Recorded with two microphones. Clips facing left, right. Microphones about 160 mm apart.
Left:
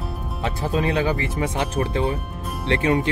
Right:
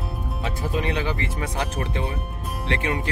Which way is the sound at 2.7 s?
30° left (ahead or behind).